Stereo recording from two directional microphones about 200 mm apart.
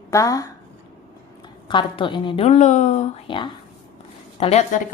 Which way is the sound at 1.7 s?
25° left (ahead or behind).